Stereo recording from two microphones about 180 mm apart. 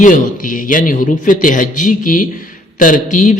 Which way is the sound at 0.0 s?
45° left (ahead or behind).